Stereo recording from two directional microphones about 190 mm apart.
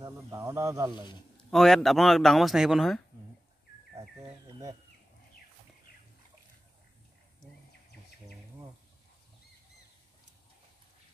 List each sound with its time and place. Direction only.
0.0 s speech: 15° right (ahead or behind)
1.5 s a man's voice: centre (ahead or behind)